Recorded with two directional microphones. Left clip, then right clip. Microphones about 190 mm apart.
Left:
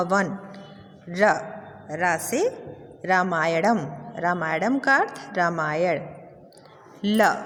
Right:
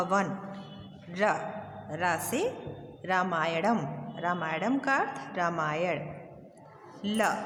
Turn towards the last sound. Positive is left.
turn(degrees=35)  # may be behind; listen again after turning